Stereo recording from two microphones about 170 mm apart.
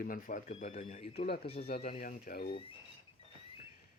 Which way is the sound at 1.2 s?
70° left (ahead or behind).